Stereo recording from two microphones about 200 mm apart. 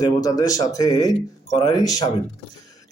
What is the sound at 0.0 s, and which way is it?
A man's voice, 15° left (ahead or behind).